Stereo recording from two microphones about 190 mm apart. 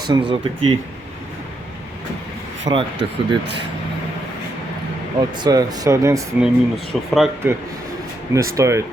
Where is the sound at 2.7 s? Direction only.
20° right (ahead or behind).